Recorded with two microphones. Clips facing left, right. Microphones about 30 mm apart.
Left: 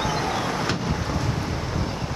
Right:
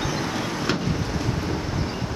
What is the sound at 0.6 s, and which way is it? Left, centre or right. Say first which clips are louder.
Vehicle: right 1 dB; centre.